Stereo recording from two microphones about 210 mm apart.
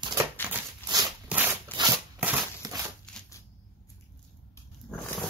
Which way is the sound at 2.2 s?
5° right (ahead or behind).